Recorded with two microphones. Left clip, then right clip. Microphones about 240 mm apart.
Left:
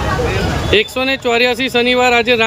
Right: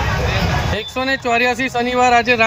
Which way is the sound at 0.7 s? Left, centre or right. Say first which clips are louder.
Left 6 dB; left.